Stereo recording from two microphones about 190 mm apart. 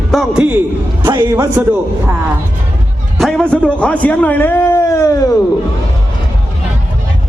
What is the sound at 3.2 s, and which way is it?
Speech, centre (ahead or behind).